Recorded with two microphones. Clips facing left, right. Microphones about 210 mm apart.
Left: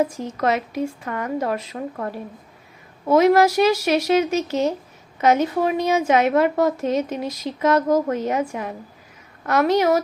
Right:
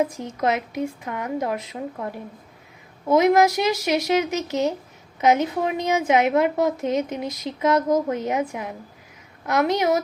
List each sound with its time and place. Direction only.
0.3 s a woman's voice: 15° right (ahead or behind)